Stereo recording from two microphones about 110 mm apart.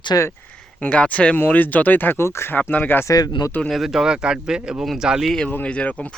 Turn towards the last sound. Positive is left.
turn(degrees=10)  # may be behind; listen again after turning